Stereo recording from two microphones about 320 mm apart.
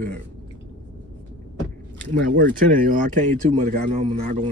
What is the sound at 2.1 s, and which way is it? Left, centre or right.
Speech, right.